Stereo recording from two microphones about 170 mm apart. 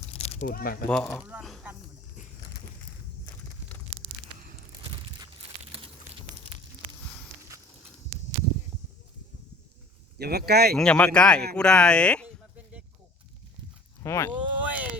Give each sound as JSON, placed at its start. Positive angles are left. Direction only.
{"t": 0.1, "sound": "biting", "side_deg": 40}
{"t": 0.4, "sound": "speech", "side_deg": 60}
{"t": 1.3, "sound": "a sound", "side_deg": -5}
{"t": 10.2, "sound": "speech", "side_deg": -70}
{"t": 10.8, "sound": "speech", "side_deg": 5}
{"t": 14.0, "sound": "speech", "side_deg": 15}
{"t": 14.3, "sound": "a sound", "side_deg": -10}